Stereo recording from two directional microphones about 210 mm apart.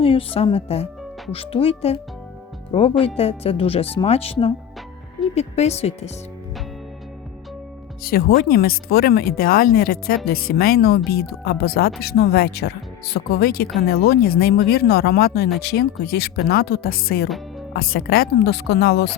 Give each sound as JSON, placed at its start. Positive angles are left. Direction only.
{"t": 0.0, "sound": "speech", "side_deg": 25}
{"t": 8.0, "sound": "speech", "side_deg": 45}